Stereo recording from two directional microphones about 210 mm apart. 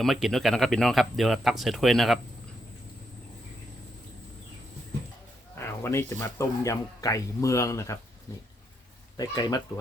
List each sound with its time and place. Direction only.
0.0 s speech: centre (ahead or behind)
5.5 s speech: 10° left (ahead or behind)
9.1 s speech: 20° left (ahead or behind)